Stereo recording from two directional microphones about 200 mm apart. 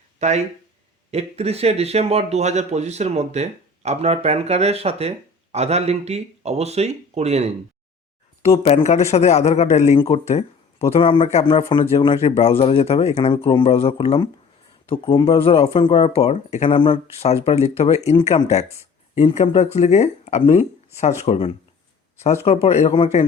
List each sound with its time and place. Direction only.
0.2 s speech: 35° right (ahead or behind)
8.4 s a man's voice: 30° left (ahead or behind)